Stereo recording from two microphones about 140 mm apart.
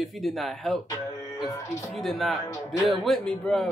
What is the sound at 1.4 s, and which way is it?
Music, 20° left (ahead or behind).